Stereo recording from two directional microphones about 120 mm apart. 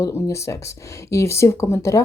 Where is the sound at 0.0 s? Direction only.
25° left (ahead or behind).